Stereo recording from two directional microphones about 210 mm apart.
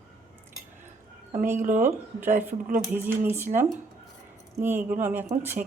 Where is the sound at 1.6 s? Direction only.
35° right (ahead or behind).